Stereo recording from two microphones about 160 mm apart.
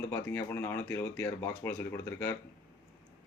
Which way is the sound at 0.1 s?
15° left (ahead or behind).